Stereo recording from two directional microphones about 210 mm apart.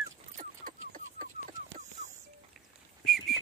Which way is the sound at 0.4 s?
40° right (ahead or behind).